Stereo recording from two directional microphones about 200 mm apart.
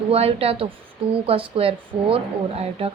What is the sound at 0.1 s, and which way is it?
A woman's voice, 30° right (ahead or behind).